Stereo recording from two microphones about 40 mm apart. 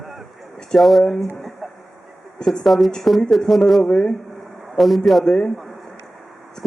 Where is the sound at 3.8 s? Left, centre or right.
Left.